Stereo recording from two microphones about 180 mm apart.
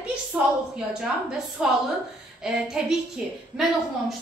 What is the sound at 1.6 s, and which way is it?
A woman's voice, 5° right (ahead or behind).